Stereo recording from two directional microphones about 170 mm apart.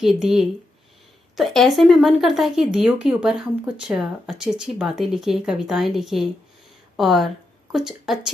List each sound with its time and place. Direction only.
0.0 s speech: centre (ahead or behind)